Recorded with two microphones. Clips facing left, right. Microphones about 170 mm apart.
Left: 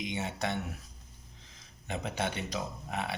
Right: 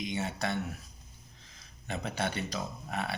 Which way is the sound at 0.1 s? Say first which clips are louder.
Right 1 dB; 20° left (ahead or behind).